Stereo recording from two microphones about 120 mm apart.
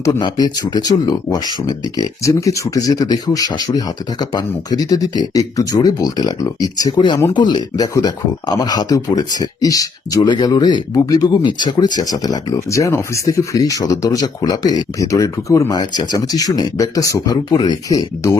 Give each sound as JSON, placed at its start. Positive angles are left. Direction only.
{"t": 0.0, "sound": "speech", "side_deg": 35}